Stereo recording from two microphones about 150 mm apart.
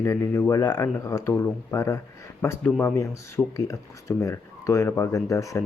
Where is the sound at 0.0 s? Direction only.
20° left (ahead or behind).